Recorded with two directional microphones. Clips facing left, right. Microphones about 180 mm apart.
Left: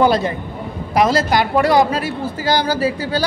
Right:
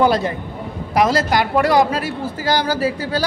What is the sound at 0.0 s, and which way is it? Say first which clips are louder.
A woman's voice: left 1 dB; 25° left (ahead or behind).